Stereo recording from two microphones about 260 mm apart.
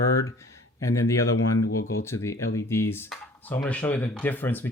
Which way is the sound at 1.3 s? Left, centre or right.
Left.